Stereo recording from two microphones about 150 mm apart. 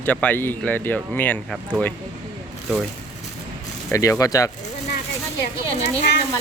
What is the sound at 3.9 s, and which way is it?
Speech, 20° left (ahead or behind).